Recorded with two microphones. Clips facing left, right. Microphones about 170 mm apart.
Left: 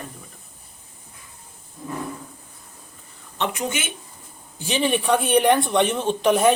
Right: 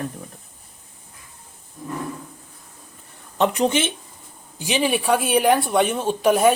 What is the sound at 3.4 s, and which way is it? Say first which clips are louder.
Speech: right 7 dB; 35° right (ahead or behind).